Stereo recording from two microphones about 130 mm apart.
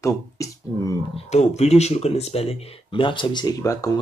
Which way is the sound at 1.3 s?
55° left (ahead or behind).